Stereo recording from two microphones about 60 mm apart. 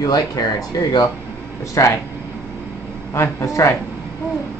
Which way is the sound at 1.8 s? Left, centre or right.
Left.